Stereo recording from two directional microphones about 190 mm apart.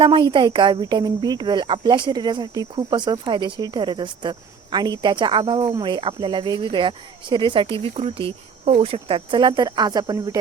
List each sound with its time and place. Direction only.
0.0 s speech: 25° right (ahead or behind)